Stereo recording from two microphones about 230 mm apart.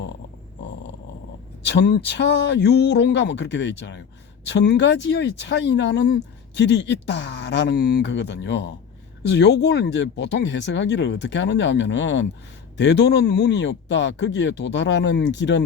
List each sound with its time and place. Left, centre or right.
1.6 s speech: left